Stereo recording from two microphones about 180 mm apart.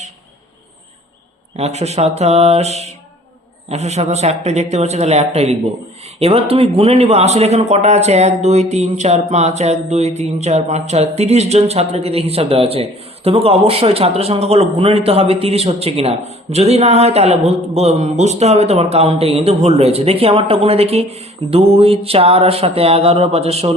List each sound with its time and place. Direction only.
1.5 s speech: 35° right (ahead or behind)